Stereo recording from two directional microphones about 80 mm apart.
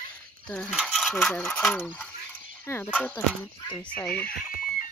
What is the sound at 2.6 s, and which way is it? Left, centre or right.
Speech, left.